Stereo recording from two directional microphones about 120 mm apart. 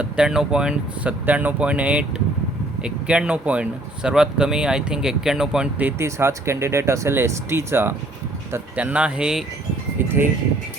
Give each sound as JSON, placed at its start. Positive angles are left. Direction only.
{"t": 0.0, "sound": "speech", "side_deg": -5}
{"t": 6.0, "sound": "speech", "side_deg": -20}